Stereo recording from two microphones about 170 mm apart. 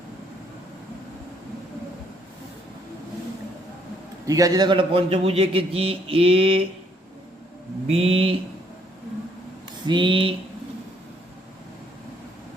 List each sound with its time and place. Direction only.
4.3 s a man's voice: 20° right (ahead or behind)
7.9 s a man's voice: 35° right (ahead or behind)
9.8 s speech: 25° right (ahead or behind)